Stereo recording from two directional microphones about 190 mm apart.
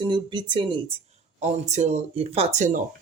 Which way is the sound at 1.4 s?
40° right (ahead or behind).